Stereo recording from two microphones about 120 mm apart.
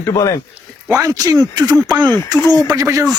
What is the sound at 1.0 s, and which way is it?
Speech, 30° right (ahead or behind).